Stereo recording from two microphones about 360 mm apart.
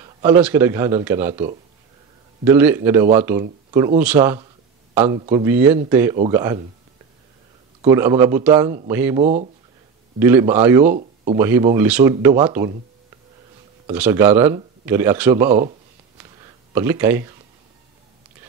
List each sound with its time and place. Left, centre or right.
0.0 s a man's voice: centre
7.8 s speech: centre
9.2 s speech: centre
10.1 s speech: centre
13.9 s speech: centre
16.7 s speech: centre